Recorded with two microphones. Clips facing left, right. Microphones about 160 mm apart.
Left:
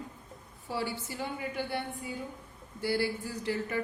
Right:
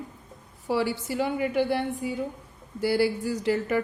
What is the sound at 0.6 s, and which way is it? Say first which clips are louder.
A woman's voice: right 9 dB; 90° right.